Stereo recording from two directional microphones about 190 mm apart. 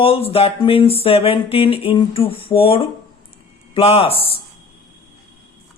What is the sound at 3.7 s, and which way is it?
Speech, 30° left (ahead or behind).